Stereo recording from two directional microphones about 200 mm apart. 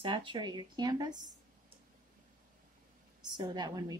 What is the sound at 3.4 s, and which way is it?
Speech, 20° right (ahead or behind).